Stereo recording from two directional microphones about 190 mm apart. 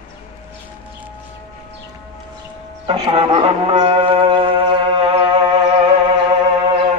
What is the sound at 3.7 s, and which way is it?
Music, 30° right (ahead or behind).